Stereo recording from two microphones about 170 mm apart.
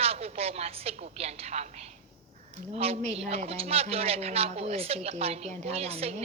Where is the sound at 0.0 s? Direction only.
35° right (ahead or behind).